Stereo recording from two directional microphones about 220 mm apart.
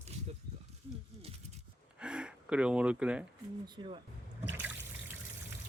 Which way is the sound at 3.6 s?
20° right (ahead or behind).